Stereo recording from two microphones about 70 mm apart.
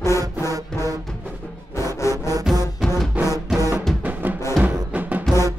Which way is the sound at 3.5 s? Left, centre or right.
Right.